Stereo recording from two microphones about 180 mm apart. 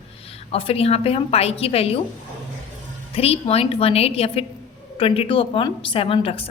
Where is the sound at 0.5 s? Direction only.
30° left (ahead or behind).